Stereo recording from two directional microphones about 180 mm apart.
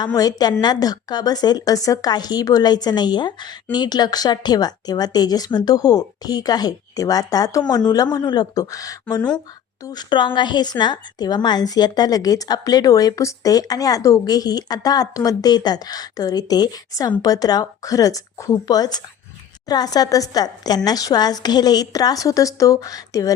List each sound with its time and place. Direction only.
0.0 s a woman's voice: 20° left (ahead or behind)